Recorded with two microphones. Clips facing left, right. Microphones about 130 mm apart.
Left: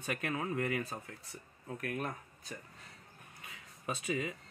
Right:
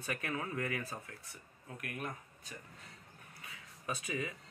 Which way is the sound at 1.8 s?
35° left (ahead or behind).